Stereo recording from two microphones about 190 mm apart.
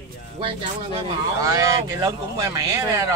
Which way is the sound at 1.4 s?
15° right (ahead or behind).